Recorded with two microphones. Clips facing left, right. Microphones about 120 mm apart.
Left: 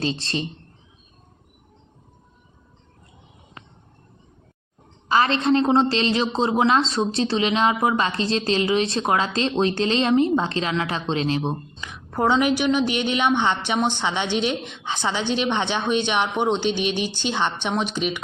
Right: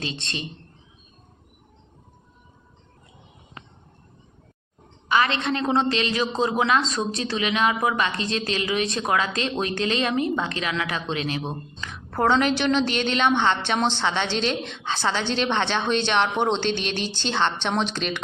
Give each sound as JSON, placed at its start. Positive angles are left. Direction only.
{"t": 0.0, "sound": "a man's voice", "side_deg": 35}
{"t": 5.0, "sound": "a woman's voice", "side_deg": 35}
{"t": 11.8, "sound": "a woman's voice", "side_deg": 15}